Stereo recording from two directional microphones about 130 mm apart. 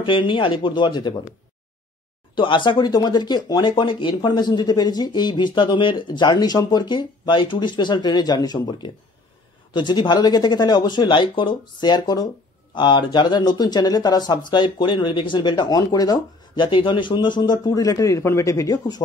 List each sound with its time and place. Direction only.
0.0 s speech: 40° left (ahead or behind)
2.3 s speech: 40° left (ahead or behind)